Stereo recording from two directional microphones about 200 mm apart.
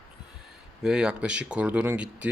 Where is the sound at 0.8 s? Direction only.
5° right (ahead or behind).